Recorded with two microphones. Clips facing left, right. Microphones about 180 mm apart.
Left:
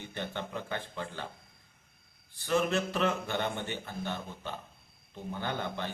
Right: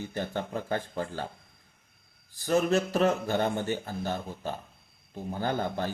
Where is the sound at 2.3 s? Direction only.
40° right (ahead or behind).